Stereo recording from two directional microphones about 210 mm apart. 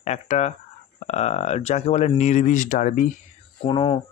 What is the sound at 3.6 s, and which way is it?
Speech, 25° left (ahead or behind).